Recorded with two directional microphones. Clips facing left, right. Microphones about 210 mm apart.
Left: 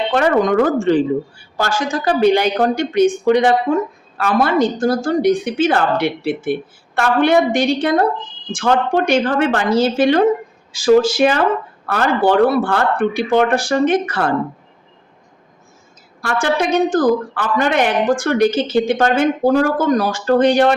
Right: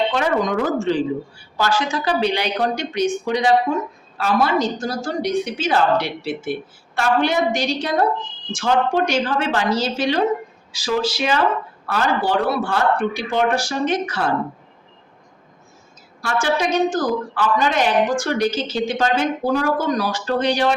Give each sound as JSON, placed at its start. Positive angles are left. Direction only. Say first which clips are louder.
{"t": 0.1, "sound": "a woman's voice", "louder": "left 5 dB", "side_deg": 55}
{"t": 16.2, "sound": "a woman's voice", "louder": "left 3 dB", "side_deg": 55}